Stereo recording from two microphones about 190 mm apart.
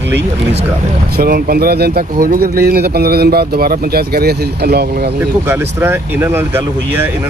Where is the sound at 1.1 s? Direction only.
50° right (ahead or behind).